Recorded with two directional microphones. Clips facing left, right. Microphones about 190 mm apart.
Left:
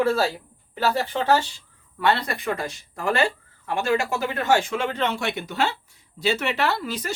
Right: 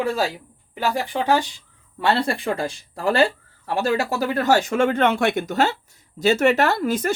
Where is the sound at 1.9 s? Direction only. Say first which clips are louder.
Right 2 dB; 30° right (ahead or behind).